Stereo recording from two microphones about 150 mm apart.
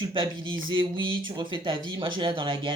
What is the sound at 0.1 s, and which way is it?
Speech, 35° right (ahead or behind).